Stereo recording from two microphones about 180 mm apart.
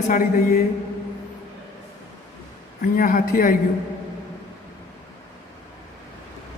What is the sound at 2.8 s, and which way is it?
Speech, 50° left (ahead or behind).